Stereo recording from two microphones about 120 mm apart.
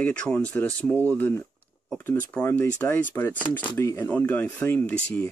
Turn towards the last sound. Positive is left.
turn(degrees=15)  # may be behind; listen again after turning